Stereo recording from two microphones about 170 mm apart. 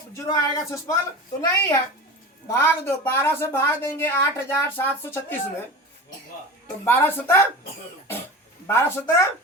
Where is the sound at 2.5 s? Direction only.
15° left (ahead or behind).